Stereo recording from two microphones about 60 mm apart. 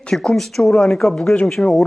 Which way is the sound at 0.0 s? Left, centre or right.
Centre.